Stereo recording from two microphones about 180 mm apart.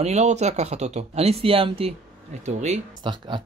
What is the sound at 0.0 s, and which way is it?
Speech, 40° right (ahead or behind).